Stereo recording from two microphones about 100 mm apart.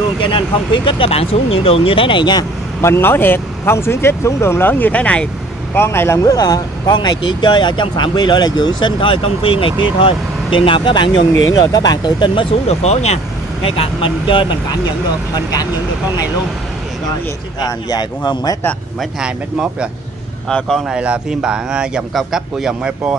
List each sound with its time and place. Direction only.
0.2 s speech: 55° left (ahead or behind)
2.8 s speech: 25° left (ahead or behind)
5.8 s speech: 25° left (ahead or behind)
6.9 s speech: 45° left (ahead or behind)
12.6 s speech: 90° left; by 14.8 s 55° left (ahead or behind)
15.3 s speech: 40° left (ahead or behind)
17.8 s speech: 45° left (ahead or behind)
20.4 s speech: 5° left (ahead or behind)
20.9 s speech: 10° right (ahead or behind)